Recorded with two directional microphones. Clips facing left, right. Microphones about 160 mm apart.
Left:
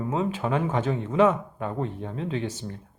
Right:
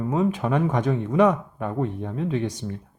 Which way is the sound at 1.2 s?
10° right (ahead or behind).